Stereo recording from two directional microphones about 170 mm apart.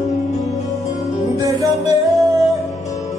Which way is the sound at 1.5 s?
20° right (ahead or behind).